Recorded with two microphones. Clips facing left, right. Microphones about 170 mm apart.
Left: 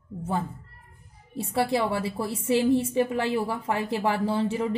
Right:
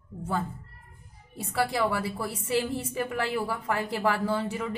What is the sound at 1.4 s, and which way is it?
A woman's voice, 25° left (ahead or behind).